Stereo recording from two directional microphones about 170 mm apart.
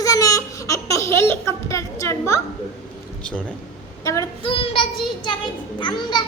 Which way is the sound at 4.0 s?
20° left (ahead or behind).